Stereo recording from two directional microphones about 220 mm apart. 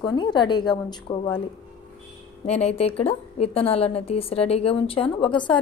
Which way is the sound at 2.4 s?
30° left (ahead or behind).